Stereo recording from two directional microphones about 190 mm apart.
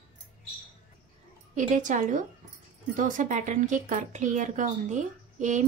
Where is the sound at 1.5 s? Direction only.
40° right (ahead or behind).